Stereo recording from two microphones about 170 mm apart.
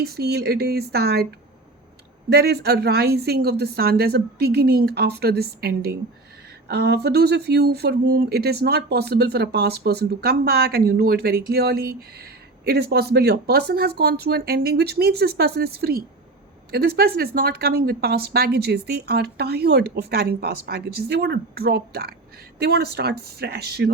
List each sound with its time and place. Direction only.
0.0 s speech: 70° right (ahead or behind)
2.3 s speech: 70° right (ahead or behind)